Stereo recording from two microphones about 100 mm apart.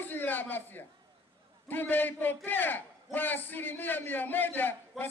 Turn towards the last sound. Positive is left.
turn(degrees=20)  # may be behind; listen again after turning